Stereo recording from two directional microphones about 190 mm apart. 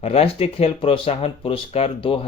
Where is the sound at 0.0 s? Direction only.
30° left (ahead or behind).